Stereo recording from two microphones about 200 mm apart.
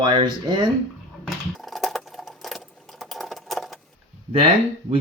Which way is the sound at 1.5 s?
Centre (ahead or behind).